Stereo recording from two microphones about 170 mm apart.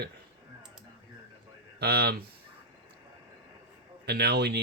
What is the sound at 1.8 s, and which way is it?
Speech, 70° right (ahead or behind).